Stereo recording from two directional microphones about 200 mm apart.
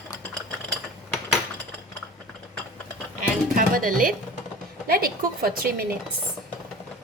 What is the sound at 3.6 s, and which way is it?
A woman's voice, 45° right (ahead or behind).